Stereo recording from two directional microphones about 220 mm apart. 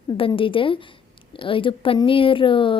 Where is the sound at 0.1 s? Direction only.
25° left (ahead or behind).